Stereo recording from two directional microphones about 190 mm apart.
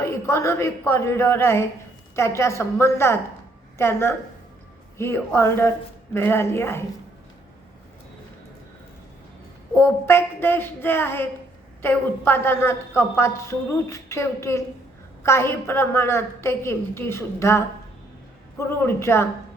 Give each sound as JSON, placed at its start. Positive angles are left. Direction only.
{"t": 0.0, "sound": "a woman's voice", "side_deg": 15}
{"t": 9.7, "sound": "a woman's voice", "side_deg": 10}